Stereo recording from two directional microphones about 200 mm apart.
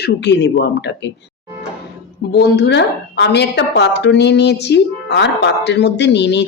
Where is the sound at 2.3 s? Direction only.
55° left (ahead or behind).